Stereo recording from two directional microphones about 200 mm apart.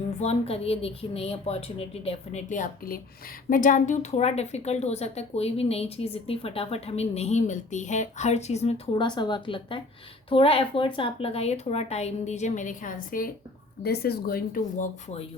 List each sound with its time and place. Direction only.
0.2 s a woman's voice: 30° left (ahead or behind)